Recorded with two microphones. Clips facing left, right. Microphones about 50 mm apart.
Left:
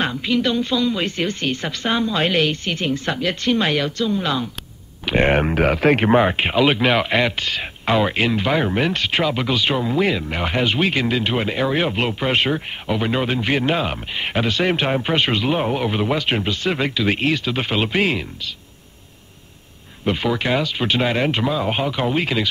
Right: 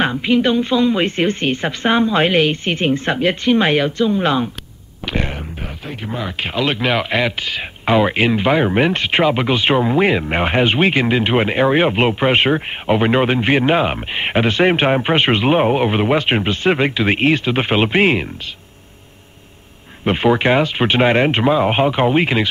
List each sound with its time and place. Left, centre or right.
0.0 s speech: right
5.3 s speech: left
6.5 s speech: centre; by 18.2 s right
20.1 s speech: right